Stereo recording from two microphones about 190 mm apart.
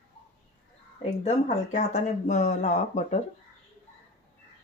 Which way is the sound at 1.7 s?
40° left (ahead or behind).